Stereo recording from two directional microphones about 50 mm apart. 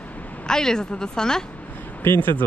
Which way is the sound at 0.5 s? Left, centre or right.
Centre.